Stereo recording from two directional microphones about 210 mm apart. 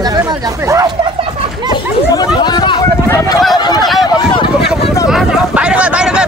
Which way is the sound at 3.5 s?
20° left (ahead or behind).